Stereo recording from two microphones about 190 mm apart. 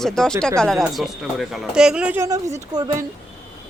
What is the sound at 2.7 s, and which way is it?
Speech, 20° right (ahead or behind).